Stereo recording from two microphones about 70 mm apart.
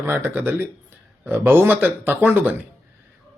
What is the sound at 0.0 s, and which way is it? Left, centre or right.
Speech, right.